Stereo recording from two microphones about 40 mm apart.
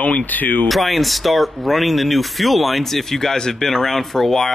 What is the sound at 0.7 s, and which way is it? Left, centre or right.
Speech, centre.